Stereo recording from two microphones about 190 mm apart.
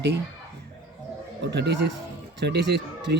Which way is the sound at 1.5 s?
60° right (ahead or behind).